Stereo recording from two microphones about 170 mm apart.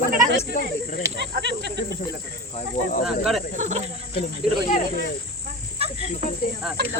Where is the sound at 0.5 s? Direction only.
60° left (ahead or behind).